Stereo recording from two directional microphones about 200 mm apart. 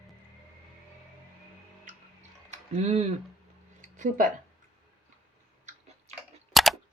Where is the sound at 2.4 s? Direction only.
30° right (ahead or behind).